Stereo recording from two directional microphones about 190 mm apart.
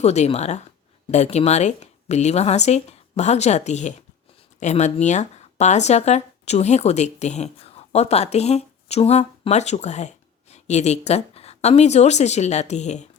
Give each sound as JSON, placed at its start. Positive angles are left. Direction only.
{"t": 0.0, "sound": "speech", "side_deg": 35}